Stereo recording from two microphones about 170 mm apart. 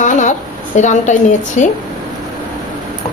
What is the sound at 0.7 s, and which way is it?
Speech, 45° left (ahead or behind).